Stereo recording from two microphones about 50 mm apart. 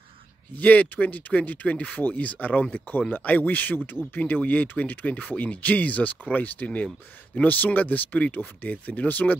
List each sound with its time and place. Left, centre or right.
0.6 s speech: left